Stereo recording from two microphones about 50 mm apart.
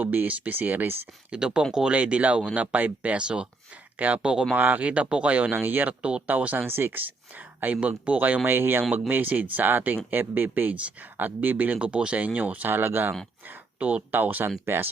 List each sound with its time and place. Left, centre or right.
0.0 s speech: right
1.3 s speech: centre
4.2 s speech: centre
4.5 s speech: right
5.5 s speech: right
5.9 s speech: right
6.2 s speech: right
6.7 s speech: right
8.4 s speech: right
9.0 s speech: right
12.7 s speech: right
13.5 s speech: right
14.6 s speech: right